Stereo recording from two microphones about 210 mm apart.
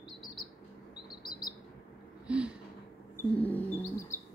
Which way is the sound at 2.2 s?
5° right (ahead or behind).